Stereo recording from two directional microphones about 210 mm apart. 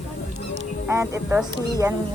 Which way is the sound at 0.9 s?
10° right (ahead or behind).